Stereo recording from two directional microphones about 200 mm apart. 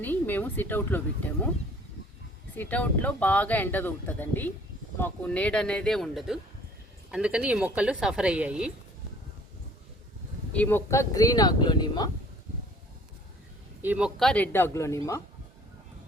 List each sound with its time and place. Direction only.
0.0 s speech: 10° left (ahead or behind)
2.6 s speech: 10° left (ahead or behind)
10.5 s speech: 10° left (ahead or behind)
13.8 s speech: 5° right (ahead or behind); by 15.2 s 15° left (ahead or behind)